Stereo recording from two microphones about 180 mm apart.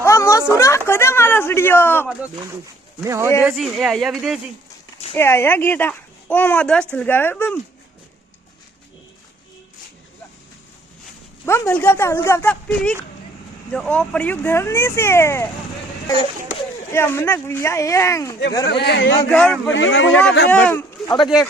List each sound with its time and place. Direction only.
0.0 s speech: 15° left (ahead or behind)
3.0 s speech: 15° right (ahead or behind)
3.4 s speech: centre (ahead or behind)
5.1 s speech: 15° left (ahead or behind)
11.4 s speech: 15° left (ahead or behind)
16.9 s speech: 15° left (ahead or behind)
18.6 s speech: 70° left (ahead or behind)
19.3 s speech: 5° left (ahead or behind)
19.7 s speech: 90° left
20.5 s speech: 10° left (ahead or behind)